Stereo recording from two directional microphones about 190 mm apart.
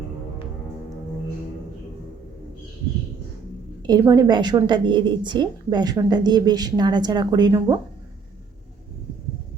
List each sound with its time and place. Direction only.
3.8 s a woman's voice: 20° right (ahead or behind)